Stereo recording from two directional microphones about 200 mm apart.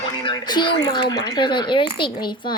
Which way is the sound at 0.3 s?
25° left (ahead or behind).